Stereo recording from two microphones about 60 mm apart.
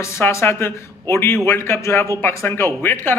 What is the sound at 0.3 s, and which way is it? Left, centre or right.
A man's voice, left.